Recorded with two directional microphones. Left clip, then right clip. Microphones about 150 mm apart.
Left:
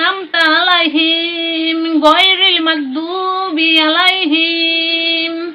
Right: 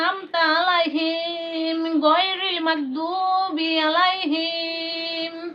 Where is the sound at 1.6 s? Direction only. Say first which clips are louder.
Left 8 dB; 35° right (ahead or behind).